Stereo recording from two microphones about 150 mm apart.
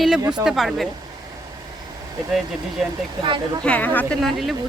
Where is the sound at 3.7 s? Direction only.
10° left (ahead or behind).